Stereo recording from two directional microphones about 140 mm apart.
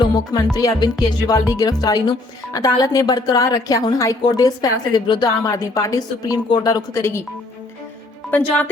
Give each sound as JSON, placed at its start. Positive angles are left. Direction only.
{"t": 0.5, "sound": "speech", "side_deg": 30}
{"t": 8.3, "sound": "speech", "side_deg": 10}